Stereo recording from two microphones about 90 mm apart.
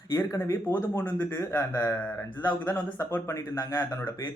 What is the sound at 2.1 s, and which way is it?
Speech, 20° left (ahead or behind).